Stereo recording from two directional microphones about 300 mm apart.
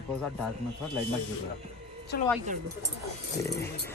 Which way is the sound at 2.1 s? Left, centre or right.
Left.